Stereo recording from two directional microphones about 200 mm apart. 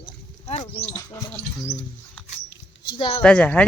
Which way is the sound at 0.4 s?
35° left (ahead or behind).